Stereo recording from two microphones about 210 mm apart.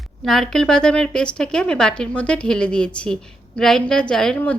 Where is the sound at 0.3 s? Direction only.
Centre (ahead or behind).